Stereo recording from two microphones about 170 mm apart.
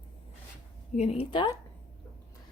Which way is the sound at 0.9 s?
40° left (ahead or behind).